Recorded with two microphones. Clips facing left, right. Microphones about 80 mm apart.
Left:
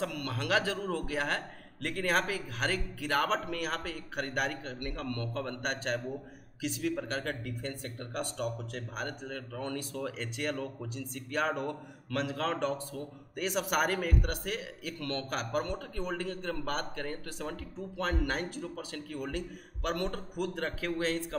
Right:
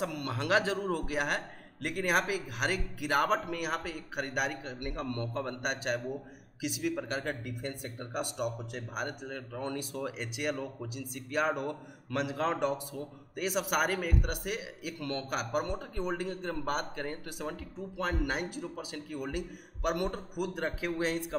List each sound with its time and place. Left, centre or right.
0.0 s a man's voice: right